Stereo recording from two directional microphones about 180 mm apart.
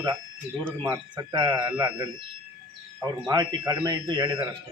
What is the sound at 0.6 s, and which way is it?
Speech, 10° right (ahead or behind).